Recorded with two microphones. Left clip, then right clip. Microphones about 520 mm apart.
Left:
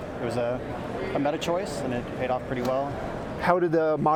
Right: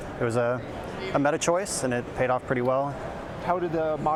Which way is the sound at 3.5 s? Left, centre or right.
Left.